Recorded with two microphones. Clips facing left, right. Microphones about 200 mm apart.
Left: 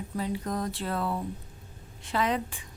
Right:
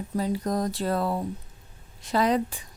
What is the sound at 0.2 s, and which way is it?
Speech, 40° right (ahead or behind).